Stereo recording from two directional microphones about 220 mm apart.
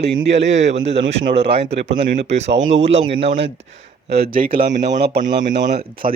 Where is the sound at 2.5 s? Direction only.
60° right (ahead or behind).